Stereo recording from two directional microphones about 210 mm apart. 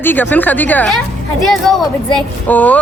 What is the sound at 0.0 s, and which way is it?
Speech, 10° left (ahead or behind).